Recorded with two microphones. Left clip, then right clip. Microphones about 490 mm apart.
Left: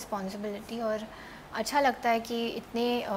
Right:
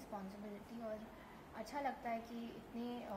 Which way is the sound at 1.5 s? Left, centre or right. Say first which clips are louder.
Left 17 dB; left.